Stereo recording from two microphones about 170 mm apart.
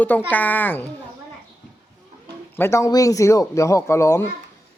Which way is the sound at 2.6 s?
15° left (ahead or behind).